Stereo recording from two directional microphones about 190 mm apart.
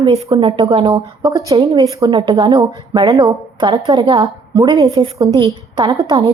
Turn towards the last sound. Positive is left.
turn(degrees=-20)  # may be behind; listen again after turning